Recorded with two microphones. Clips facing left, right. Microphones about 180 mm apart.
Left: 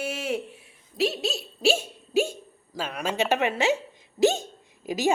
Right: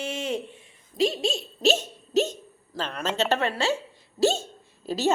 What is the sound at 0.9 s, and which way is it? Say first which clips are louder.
A woman's voice: right 2 dB; 5° left (ahead or behind).